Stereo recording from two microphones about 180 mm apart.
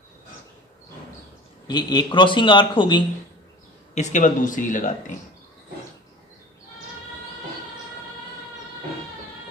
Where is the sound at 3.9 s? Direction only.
40° left (ahead or behind).